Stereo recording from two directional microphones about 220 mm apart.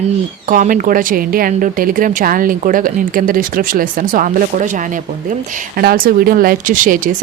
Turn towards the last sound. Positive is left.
turn(degrees=-35)  # may be behind; listen again after turning